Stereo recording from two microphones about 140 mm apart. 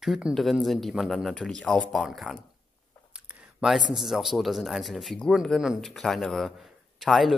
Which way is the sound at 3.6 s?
Centre (ahead or behind).